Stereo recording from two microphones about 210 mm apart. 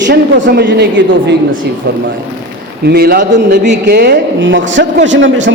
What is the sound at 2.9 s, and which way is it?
Speech, 50° right (ahead or behind).